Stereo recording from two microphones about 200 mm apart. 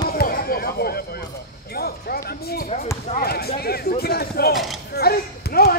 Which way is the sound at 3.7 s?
50° left (ahead or behind).